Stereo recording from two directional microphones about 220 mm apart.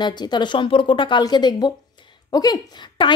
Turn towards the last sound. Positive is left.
turn(degrees=15)  # may be behind; listen again after turning